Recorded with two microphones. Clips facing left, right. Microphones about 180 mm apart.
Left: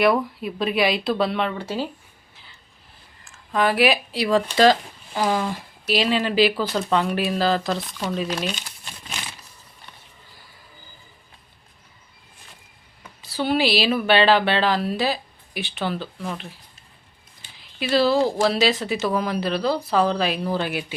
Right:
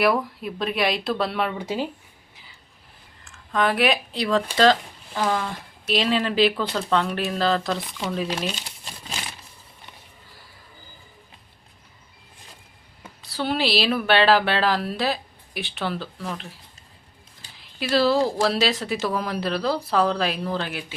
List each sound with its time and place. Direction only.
0.0 s speech: centre (ahead or behind)
1.5 s speech: 15° right (ahead or behind)
3.2 s speech: 5° left (ahead or behind)
8.5 s crumpling: 35° right (ahead or behind)
13.0 s speech: centre (ahead or behind)
17.7 s speech: centre (ahead or behind)
20.6 s speech: 15° left (ahead or behind)